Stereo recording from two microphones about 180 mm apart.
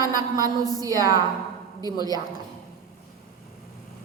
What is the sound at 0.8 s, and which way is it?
Speech, 20° right (ahead or behind).